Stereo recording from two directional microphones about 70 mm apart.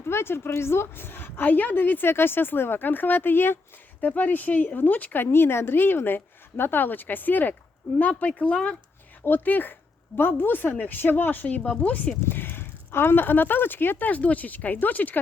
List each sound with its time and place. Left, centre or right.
0.0 s a woman's voice: left; by 8.7 s centre
9.2 s speech: left
12.2 s speech: left